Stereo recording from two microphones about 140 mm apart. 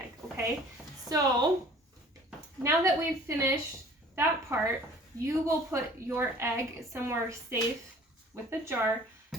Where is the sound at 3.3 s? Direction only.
20° right (ahead or behind).